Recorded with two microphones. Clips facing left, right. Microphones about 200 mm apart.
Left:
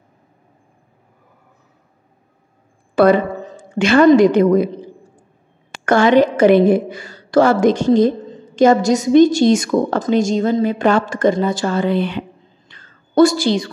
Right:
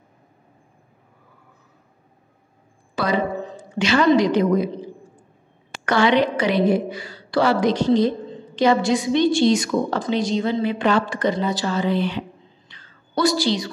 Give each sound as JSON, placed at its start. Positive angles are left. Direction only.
{"t": 3.0, "sound": "a woman's voice", "side_deg": 55}
{"t": 5.9, "sound": "a woman's voice", "side_deg": 45}
{"t": 12.6, "sound": "whispering", "side_deg": 50}